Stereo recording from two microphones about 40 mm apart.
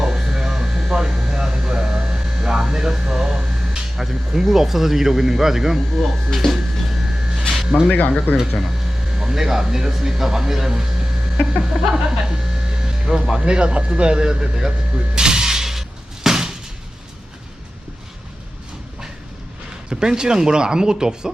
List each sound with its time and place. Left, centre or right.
0.0 s hum: centre
7.3 s a sound: centre
7.9 s speech: left
9.1 s speech: centre
14.9 s a sound: centre
19.9 s speech: centre